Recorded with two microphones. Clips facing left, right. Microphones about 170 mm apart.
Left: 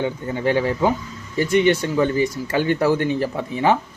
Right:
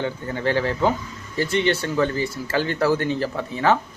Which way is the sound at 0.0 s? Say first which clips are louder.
Left 3 dB; 15° left (ahead or behind).